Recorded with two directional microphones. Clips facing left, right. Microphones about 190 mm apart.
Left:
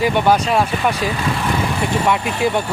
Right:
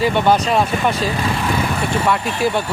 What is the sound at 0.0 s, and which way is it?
Speech, 10° left (ahead or behind).